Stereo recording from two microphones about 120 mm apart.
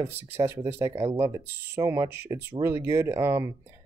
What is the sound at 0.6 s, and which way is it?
Speech, 50° right (ahead or behind).